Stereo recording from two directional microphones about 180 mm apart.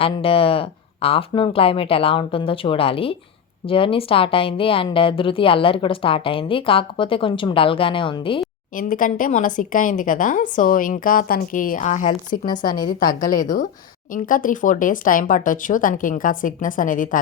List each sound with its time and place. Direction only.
0.0 s a woman's voice: 30° left (ahead or behind)
8.7 s speech: 50° left (ahead or behind)
12.8 s speech: 50° left (ahead or behind)